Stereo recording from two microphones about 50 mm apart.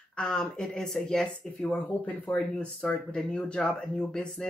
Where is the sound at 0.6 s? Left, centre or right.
Centre.